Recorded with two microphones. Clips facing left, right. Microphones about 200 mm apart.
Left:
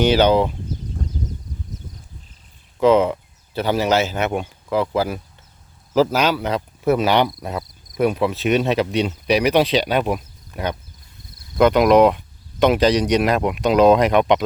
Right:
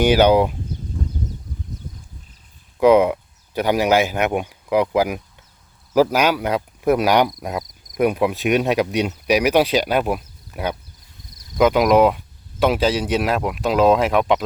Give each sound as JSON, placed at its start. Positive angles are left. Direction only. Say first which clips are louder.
{"t": 0.0, "sound": "speech", "louder": "right 1 dB", "side_deg": -10}
{"t": 2.8, "sound": "speech", "louder": "right 2 dB", "side_deg": -10}